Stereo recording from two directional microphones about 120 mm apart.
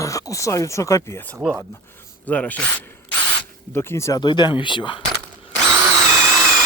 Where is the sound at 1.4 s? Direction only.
10° right (ahead or behind).